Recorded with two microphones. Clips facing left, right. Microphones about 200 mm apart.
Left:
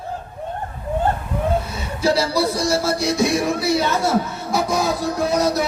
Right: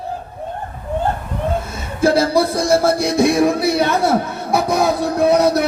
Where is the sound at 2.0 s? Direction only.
50° right (ahead or behind).